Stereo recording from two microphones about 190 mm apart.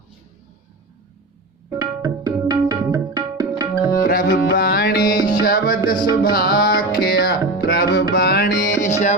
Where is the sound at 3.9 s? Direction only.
45° left (ahead or behind).